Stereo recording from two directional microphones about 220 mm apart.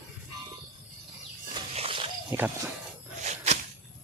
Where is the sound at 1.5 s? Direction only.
25° right (ahead or behind).